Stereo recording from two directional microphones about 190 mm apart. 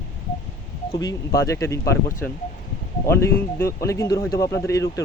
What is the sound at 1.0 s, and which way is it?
Speech, 15° left (ahead or behind).